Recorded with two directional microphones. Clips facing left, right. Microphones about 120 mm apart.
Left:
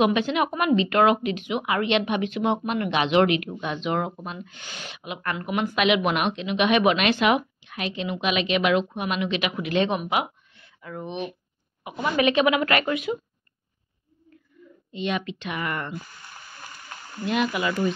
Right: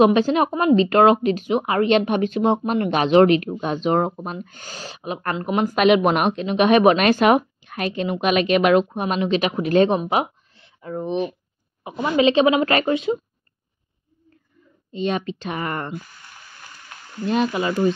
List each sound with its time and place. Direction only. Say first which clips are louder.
0.0 s a woman's voice: right 6 dB; 35° right (ahead or behind)
14.9 s speech: right 4 dB; 35° right (ahead or behind)
17.3 s speech: right 4 dB; 35° right (ahead or behind)